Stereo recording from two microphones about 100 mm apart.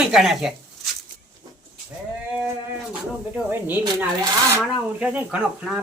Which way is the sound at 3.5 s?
20° right (ahead or behind).